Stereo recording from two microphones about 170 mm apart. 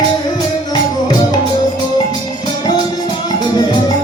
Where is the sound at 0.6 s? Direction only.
25° left (ahead or behind).